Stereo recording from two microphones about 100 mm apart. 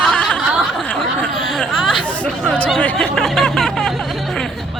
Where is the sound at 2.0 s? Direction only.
15° left (ahead or behind).